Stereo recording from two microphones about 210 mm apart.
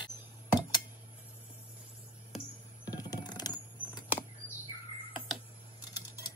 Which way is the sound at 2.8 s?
20° left (ahead or behind).